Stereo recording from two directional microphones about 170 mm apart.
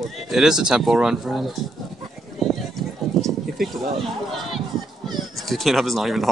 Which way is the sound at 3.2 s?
Centre (ahead or behind).